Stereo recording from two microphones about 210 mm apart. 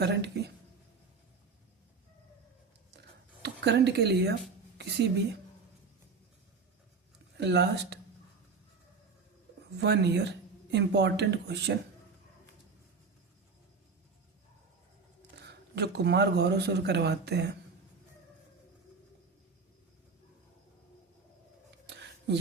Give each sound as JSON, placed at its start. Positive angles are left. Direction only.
{"t": 0.0, "sound": "a sound", "side_deg": -55}
{"t": 3.4, "sound": "speech", "side_deg": -55}
{"t": 7.3, "sound": "speech", "side_deg": -55}
{"t": 9.8, "sound": "speech", "side_deg": -55}
{"t": 15.4, "sound": "speech", "side_deg": -50}
{"t": 21.8, "sound": "a sound", "side_deg": -55}